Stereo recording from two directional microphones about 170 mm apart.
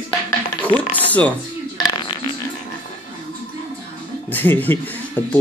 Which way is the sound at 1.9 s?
25° left (ahead or behind).